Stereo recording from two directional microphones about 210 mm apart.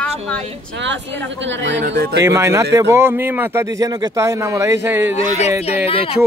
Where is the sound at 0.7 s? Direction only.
60° right (ahead or behind).